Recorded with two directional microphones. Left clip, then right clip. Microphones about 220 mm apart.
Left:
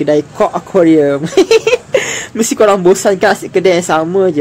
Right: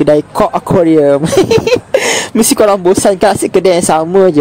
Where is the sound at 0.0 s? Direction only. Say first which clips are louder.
Right 2 dB; 40° right (ahead or behind).